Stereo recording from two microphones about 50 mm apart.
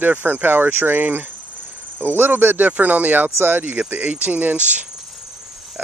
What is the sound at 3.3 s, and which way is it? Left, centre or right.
Speech, right.